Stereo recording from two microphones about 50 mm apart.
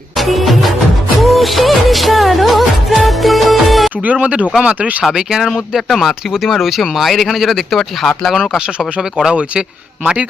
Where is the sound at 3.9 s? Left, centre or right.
Right.